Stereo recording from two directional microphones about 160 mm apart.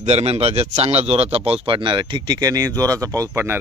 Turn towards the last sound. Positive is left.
turn(degrees=-15)  # may be behind; listen again after turning